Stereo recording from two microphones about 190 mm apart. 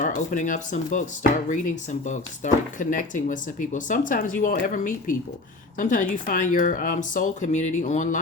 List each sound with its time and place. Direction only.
0.0 s speech: 40° left (ahead or behind)